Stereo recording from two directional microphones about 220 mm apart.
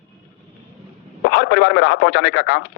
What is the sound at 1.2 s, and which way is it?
A man's voice, 50° left (ahead or behind).